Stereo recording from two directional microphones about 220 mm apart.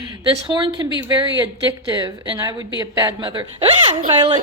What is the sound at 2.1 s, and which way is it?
A woman's voice, 15° right (ahead or behind).